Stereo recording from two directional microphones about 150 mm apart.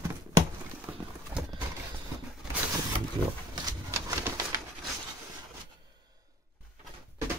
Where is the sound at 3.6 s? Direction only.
20° right (ahead or behind).